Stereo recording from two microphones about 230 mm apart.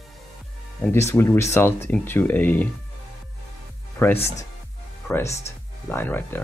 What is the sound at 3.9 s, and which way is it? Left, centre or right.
Speech, centre.